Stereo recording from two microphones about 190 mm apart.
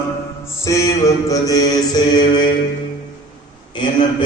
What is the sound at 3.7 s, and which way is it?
Mantra, 25° left (ahead or behind).